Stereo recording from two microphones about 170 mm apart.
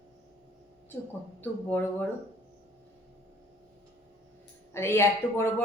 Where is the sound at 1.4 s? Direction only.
10° left (ahead or behind).